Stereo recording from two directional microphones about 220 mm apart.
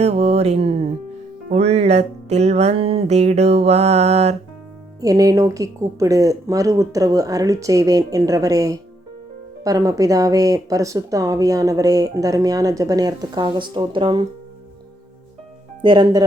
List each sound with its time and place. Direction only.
0.0 s music: 30° right (ahead or behind)
4.9 s speech: 15° right (ahead or behind)
15.8 s music: 20° right (ahead or behind)